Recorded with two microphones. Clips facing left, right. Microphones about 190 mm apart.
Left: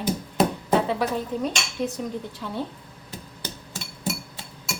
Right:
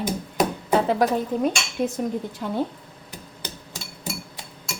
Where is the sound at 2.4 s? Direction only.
50° right (ahead or behind).